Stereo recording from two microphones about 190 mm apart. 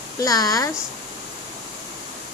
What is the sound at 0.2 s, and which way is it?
Speech, 20° left (ahead or behind).